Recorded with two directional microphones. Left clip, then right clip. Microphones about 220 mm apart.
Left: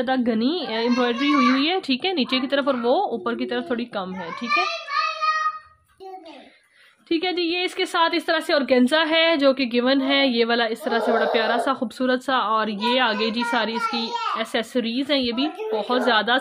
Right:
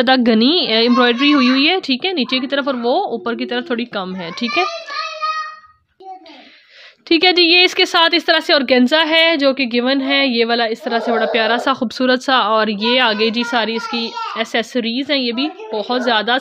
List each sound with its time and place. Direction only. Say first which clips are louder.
0.0 s a woman's voice: right 9 dB; 40° right (ahead or behind)
7.1 s a woman's voice: right 12 dB; 45° right (ahead or behind); by 16.3 s 20° right (ahead or behind)